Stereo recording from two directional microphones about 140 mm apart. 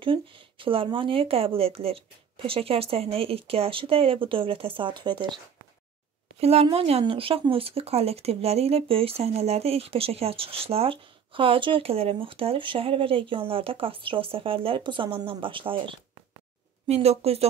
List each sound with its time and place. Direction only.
0.0 s speech: 40° right (ahead or behind)
6.4 s speech: 45° right (ahead or behind)
16.8 s speech: 50° right (ahead or behind)